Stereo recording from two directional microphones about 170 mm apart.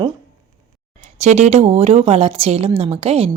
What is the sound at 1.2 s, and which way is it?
A woman's voice, 40° right (ahead or behind).